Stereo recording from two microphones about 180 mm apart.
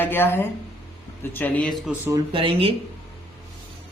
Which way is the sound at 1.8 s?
10° right (ahead or behind).